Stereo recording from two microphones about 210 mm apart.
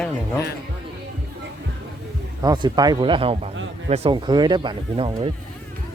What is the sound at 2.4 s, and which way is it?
Speech, 20° right (ahead or behind).